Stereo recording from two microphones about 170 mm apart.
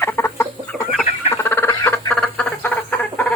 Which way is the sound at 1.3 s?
15° left (ahead or behind).